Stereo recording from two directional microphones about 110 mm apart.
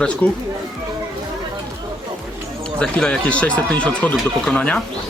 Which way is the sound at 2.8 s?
10° left (ahead or behind).